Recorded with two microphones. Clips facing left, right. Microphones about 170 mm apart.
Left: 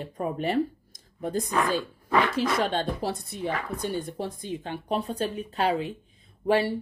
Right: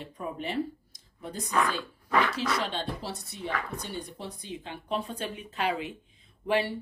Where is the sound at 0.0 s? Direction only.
45° left (ahead or behind).